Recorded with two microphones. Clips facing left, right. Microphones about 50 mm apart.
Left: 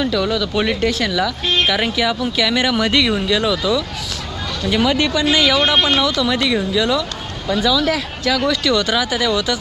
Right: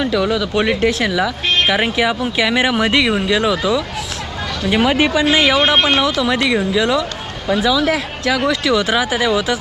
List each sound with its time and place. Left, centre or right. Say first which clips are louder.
0.0 s speech: right 2 dB; centre